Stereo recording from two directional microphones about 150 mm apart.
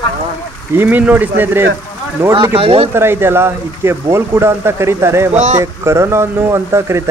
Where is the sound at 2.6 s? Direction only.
40° right (ahead or behind).